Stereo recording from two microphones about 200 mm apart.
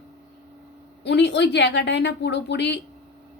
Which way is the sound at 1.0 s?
60° left (ahead or behind).